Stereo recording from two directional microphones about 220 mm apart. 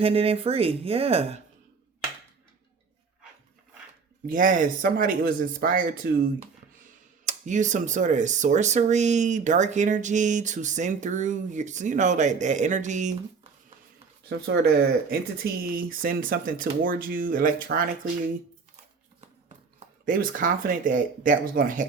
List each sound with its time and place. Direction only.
0.0 s speech: 25° right (ahead or behind)
4.3 s speech: 35° right (ahead or behind)
14.3 s speech: 45° right (ahead or behind)
20.1 s speech: 40° right (ahead or behind)